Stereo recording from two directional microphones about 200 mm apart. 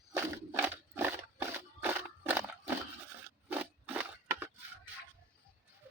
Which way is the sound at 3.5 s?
10° right (ahead or behind).